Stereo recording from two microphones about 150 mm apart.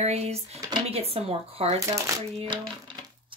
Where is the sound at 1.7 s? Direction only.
20° right (ahead or behind).